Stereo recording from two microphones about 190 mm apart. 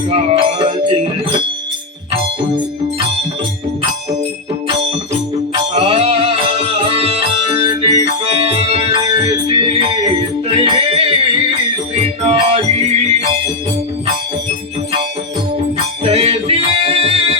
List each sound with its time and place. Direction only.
5.7 s music: 30° right (ahead or behind)
16.0 s music: 35° right (ahead or behind)